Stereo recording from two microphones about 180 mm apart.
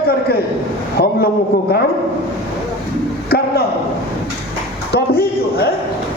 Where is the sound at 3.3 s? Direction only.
60° left (ahead or behind).